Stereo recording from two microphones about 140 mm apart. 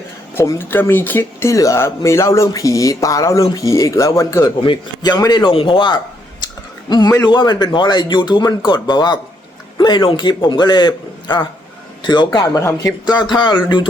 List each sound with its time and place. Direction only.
0.3 s speech: 15° left (ahead or behind)
4.6 s speech: 35° left (ahead or behind)